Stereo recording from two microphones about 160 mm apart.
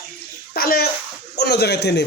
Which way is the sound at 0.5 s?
70° left (ahead or behind).